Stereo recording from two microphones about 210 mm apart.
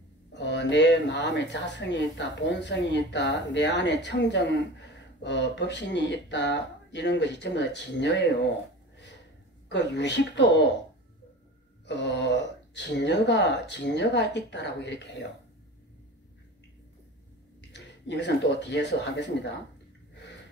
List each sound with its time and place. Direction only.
0.3 s speech: 55° left (ahead or behind)
9.7 s speech: 55° left (ahead or behind)
11.8 s speech: 55° left (ahead or behind)
17.6 s speech: 55° left (ahead or behind)